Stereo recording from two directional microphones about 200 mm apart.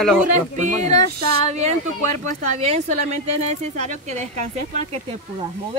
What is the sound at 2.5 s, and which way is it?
Speech, 35° right (ahead or behind).